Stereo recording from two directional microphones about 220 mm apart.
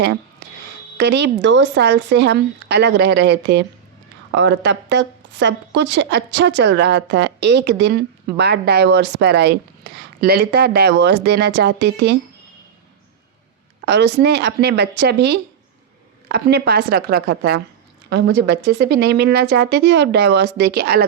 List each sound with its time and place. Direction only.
0.9 s a woman's voice: 50° right (ahead or behind)
13.8 s a woman's voice: 50° right (ahead or behind)